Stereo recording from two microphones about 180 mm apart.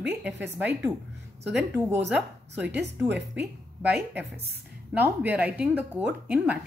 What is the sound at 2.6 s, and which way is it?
Speech, 70° right (ahead or behind).